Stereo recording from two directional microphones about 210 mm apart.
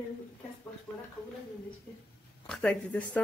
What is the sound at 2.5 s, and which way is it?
Speech, 5° left (ahead or behind).